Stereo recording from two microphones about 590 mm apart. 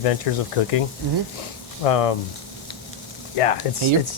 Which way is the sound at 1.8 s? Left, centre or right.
Left.